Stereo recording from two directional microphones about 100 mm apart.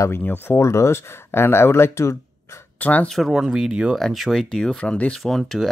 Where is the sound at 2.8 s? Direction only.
15° left (ahead or behind).